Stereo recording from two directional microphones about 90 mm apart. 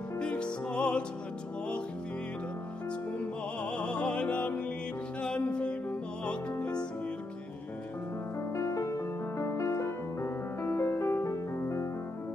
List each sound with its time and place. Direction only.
0.2 s music: 10° left (ahead or behind)
3.7 s music: 10° left (ahead or behind)
8.4 s music: 35° left (ahead or behind)